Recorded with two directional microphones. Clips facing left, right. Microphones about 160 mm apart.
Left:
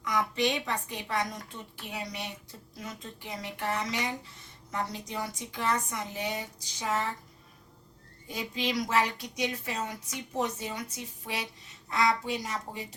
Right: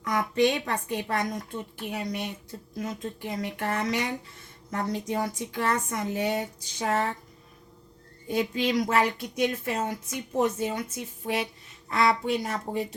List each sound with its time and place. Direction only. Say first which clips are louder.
0.0 s a woman's voice: right 5 dB; 50° right (ahead or behind)
8.3 s a woman's voice: right 7 dB; 55° right (ahead or behind)